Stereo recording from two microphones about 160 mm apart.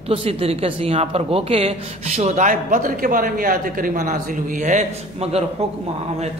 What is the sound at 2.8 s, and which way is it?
A man's voice, 60° right (ahead or behind).